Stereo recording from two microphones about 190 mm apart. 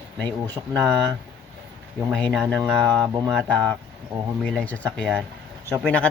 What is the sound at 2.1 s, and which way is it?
Speech, 5° left (ahead or behind).